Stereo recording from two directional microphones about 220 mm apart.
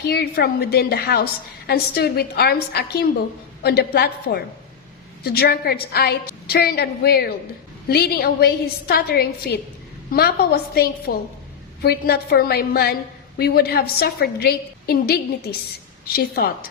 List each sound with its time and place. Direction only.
0.0 s a woman's voice: 45° left (ahead or behind)